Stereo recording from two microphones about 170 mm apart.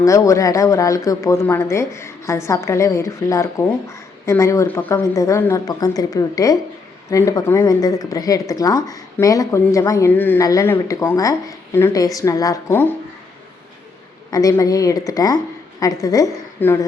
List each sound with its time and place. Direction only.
0.0 s speech: 20° left (ahead or behind)
14.3 s speech: 20° left (ahead or behind)